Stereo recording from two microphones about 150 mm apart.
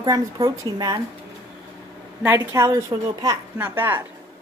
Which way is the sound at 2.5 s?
20° right (ahead or behind).